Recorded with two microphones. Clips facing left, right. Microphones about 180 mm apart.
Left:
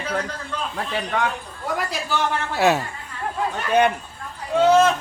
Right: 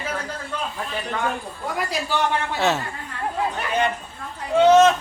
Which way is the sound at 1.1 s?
80° left.